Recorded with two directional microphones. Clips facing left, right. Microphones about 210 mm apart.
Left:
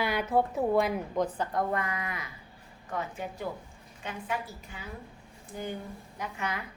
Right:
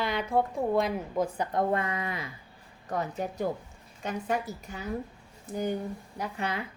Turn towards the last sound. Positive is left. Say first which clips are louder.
# right 3 dB
turn(degrees=-30)  # may be behind; listen again after turning